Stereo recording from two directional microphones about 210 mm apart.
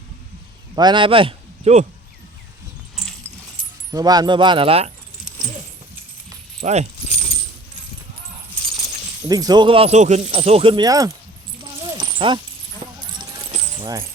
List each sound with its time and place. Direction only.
0.8 s a man's voice: 20° right (ahead or behind)
2.9 s dog: centre (ahead or behind)
3.9 s speech: 20° right (ahead or behind)
6.6 s speech: 30° right (ahead or behind)
7.3 s keys jangling: 25° left (ahead or behind)
9.3 s speech: 20° right (ahead or behind)
11.6 s a sound: 25° right (ahead or behind)
13.0 s keys jangling: 20° right (ahead or behind)